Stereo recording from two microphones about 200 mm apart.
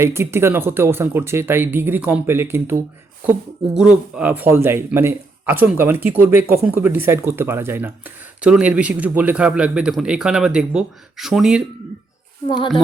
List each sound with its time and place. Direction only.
0.0 s speech: 15° right (ahead or behind)
3.8 s speech: 5° right (ahead or behind)
12.5 s speech: 25° left (ahead or behind)